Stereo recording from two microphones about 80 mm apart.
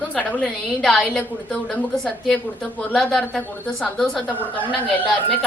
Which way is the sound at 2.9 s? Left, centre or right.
Centre.